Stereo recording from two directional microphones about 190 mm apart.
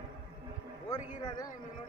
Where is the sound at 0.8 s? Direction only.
20° left (ahead or behind).